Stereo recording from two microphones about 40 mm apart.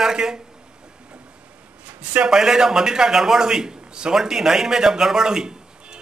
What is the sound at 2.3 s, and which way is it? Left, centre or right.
A man's voice, centre.